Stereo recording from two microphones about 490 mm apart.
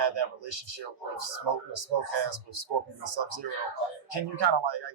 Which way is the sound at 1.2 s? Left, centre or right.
Right.